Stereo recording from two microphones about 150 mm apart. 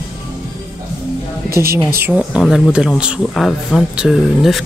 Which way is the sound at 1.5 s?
90° right.